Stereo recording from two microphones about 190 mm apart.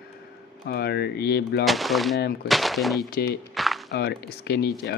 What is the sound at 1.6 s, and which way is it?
Speech, centre (ahead or behind).